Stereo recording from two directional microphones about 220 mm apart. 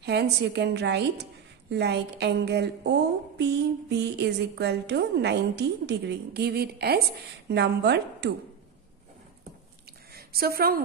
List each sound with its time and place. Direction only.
0.0 s a woman's voice: 50° right (ahead or behind)
10.1 s a woman's voice: 45° right (ahead or behind)